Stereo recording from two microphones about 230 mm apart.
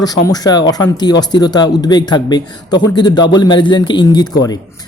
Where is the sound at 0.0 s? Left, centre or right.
Centre.